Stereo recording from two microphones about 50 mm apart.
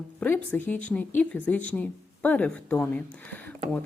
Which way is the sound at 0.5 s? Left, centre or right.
Left.